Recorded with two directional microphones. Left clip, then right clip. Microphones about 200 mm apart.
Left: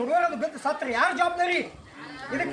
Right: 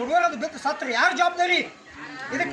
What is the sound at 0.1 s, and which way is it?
Speech, 15° left (ahead or behind).